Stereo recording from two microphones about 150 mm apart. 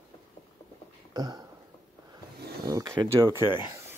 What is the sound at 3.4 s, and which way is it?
Speech, 30° left (ahead or behind).